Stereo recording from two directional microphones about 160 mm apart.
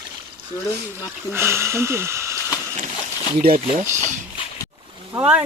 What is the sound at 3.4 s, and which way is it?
Speech, 65° right (ahead or behind).